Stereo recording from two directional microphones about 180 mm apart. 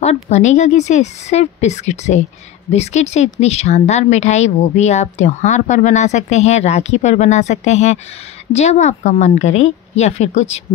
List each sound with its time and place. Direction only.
0.0 s speech: 40° left (ahead or behind)